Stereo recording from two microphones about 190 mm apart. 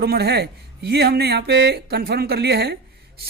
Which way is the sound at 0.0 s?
55° right (ahead or behind).